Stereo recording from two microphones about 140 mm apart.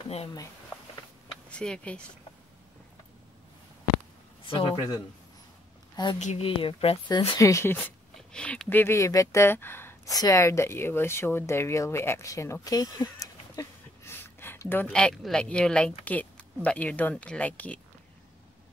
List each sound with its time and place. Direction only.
1.3 s speech: 5° left (ahead or behind)
4.5 s speech: 40° left (ahead or behind)
6.1 s a woman's voice: 50° left (ahead or behind)
7.1 s speech: 25° left (ahead or behind)